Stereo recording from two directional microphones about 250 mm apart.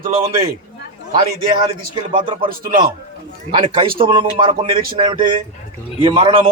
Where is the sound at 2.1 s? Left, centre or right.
Centre.